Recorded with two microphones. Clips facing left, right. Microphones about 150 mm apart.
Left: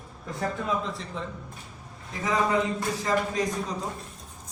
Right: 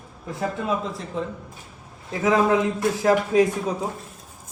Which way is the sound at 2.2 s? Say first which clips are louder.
Right 6 dB; 85° right.